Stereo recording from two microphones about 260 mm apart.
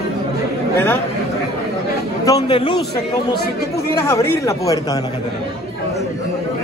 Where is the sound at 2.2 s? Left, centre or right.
Centre.